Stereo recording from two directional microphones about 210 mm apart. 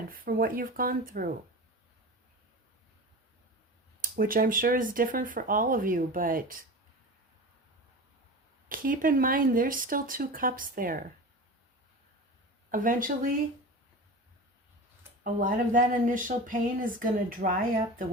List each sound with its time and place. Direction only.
0.1 s speech: 40° right (ahead or behind)
4.0 s speech: 40° right (ahead or behind)
8.7 s speech: 40° right (ahead or behind)
12.7 s speech: 40° right (ahead or behind)
15.2 s speech: 40° right (ahead or behind)